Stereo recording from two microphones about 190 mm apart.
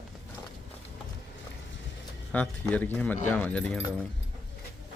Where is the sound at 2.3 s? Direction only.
10° left (ahead or behind).